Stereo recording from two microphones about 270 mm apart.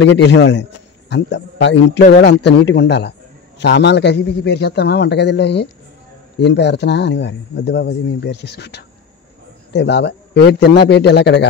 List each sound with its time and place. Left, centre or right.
0.0 s a man's voice: left